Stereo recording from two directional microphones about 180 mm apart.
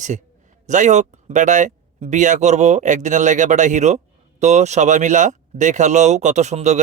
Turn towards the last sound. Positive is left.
turn(degrees=-40)  # may be behind; listen again after turning